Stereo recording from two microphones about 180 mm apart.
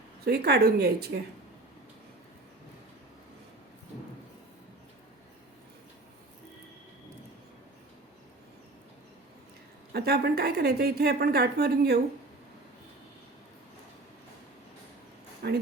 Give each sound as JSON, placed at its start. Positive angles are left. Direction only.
{"t": 0.3, "sound": "a woman's voice", "side_deg": -65}
{"t": 9.9, "sound": "a woman's voice", "side_deg": -60}
{"t": 15.4, "sound": "speech", "side_deg": -65}